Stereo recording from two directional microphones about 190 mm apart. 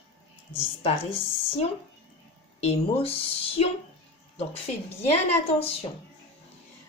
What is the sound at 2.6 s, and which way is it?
Speech, 35° left (ahead or behind).